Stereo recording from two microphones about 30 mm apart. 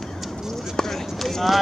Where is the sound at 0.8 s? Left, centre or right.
Centre.